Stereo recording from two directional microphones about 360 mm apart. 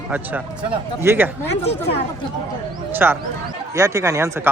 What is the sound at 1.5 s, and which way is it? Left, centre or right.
Speech, centre.